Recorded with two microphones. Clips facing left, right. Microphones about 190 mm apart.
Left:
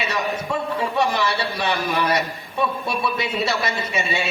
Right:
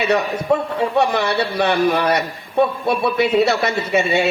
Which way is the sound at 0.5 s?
60° right (ahead or behind).